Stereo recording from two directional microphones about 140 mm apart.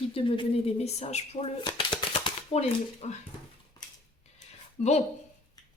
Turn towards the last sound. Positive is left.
turn(degrees=50)  # may be behind; listen again after turning